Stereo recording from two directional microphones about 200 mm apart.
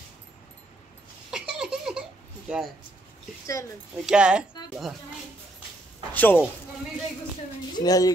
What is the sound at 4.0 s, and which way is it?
Speech, 5° right (ahead or behind).